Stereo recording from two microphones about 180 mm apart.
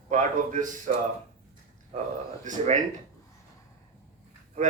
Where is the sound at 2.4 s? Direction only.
45° right (ahead or behind).